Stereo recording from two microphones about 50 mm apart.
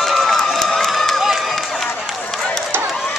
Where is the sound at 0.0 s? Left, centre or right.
Centre.